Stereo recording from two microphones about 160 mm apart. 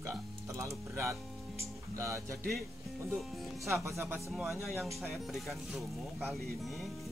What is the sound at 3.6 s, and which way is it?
Speech, 15° right (ahead or behind).